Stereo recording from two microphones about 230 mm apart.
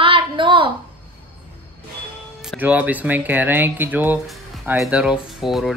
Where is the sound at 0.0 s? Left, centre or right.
Right.